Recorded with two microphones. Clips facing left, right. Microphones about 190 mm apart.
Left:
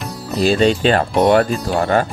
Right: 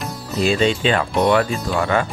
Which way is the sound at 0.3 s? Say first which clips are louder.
Left 3 dB; 35° left (ahead or behind).